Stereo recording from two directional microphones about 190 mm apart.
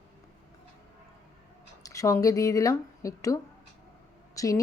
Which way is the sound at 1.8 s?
15° left (ahead or behind).